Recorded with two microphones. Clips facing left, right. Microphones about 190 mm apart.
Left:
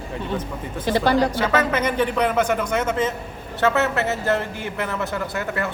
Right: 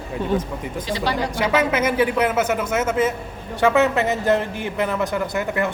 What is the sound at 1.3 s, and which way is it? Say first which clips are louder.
A man's voice: right 1 dB; 10° right (ahead or behind).